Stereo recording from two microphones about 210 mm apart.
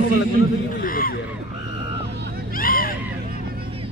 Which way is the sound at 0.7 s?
40° left (ahead or behind).